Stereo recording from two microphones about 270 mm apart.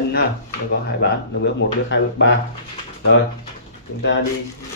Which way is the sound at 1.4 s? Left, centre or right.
Left.